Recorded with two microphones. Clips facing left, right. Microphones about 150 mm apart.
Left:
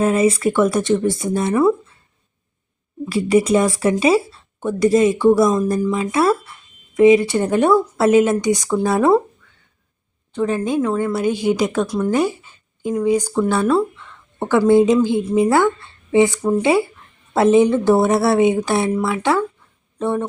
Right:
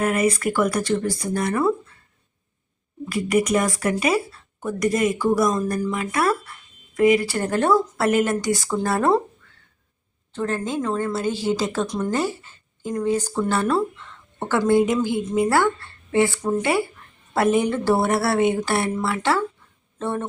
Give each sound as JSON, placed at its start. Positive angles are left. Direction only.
{"t": 0.0, "sound": "speech", "side_deg": 25}
{"t": 3.1, "sound": "speech", "side_deg": 30}
{"t": 10.3, "sound": "a woman's voice", "side_deg": 15}
{"t": 11.9, "sound": "a woman's voice", "side_deg": 5}